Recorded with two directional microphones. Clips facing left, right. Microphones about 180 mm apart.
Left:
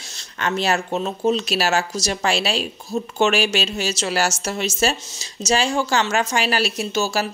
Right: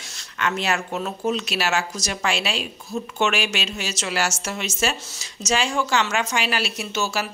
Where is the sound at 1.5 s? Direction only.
35° left (ahead or behind).